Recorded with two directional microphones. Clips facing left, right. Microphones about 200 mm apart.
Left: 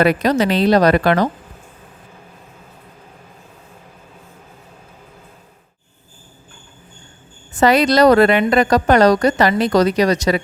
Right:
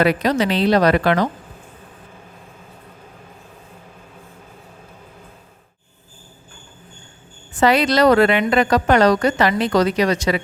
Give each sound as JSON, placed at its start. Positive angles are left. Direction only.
{"t": 0.0, "sound": "a woman's voice", "side_deg": 45}
{"t": 7.5, "sound": "a woman's voice", "side_deg": 40}